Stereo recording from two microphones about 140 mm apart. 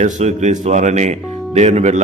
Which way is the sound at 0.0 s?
55° right (ahead or behind).